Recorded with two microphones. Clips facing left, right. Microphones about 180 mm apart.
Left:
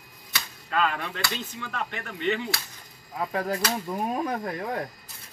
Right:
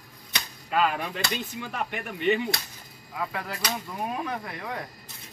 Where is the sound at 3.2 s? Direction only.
40° left (ahead or behind).